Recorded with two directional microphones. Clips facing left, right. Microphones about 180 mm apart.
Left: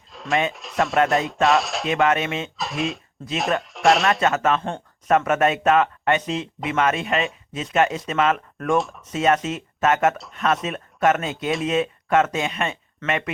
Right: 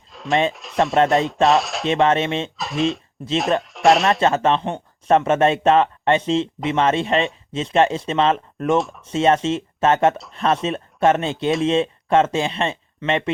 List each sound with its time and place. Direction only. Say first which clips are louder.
0.1 s a sound: right 3 dB; centre (ahead or behind)
1.5 s speech: right 2 dB; centre (ahead or behind)
1.9 s speech: right 3 dB; 30° right (ahead or behind)
2.6 s speech: right 5 dB; centre (ahead or behind)
4.2 s speech: right 3 dB; 30° right (ahead or behind)